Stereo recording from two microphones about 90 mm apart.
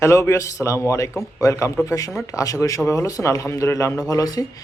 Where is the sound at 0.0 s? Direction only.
30° left (ahead or behind).